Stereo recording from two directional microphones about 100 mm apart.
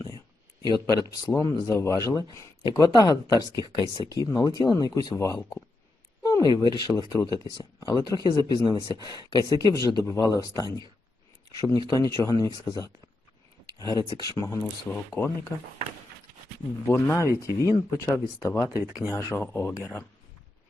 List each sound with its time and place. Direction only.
0.7 s speech: 40° left (ahead or behind)
2.6 s speech: 45° left (ahead or behind)
6.2 s a sound: 40° left (ahead or behind)
6.6 s speech: 40° left (ahead or behind)
9.4 s speech: 40° right (ahead or behind)
9.8 s speech: 35° left (ahead or behind)
13.7 s speech: 40° right (ahead or behind)
14.1 s speech: 40° left (ahead or behind)
16.9 s speech: 25° left (ahead or behind)